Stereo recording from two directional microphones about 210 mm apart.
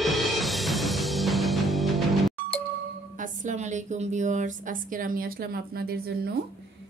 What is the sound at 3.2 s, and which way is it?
A woman's voice, 35° right (ahead or behind).